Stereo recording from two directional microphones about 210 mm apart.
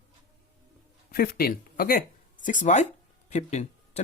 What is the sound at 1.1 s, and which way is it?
Speech, 45° left (ahead or behind).